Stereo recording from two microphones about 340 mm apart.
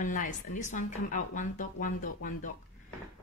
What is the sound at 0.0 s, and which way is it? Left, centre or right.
A woman's voice, left.